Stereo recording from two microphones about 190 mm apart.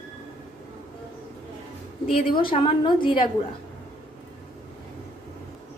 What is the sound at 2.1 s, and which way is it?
A woman's voice, 30° left (ahead or behind).